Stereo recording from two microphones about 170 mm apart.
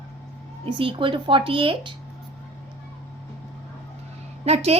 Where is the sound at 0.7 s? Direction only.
30° right (ahead or behind).